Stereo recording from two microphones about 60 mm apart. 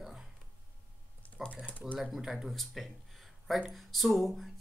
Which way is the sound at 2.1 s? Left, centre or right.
Centre.